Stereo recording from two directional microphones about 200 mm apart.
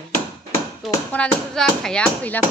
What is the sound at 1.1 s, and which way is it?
Speech, 5° left (ahead or behind).